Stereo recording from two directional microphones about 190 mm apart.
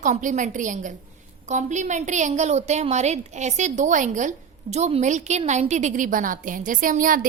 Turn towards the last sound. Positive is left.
turn(degrees=-45)  # may be behind; listen again after turning